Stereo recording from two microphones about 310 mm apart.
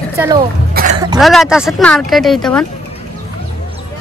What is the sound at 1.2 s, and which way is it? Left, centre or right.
Speech, centre.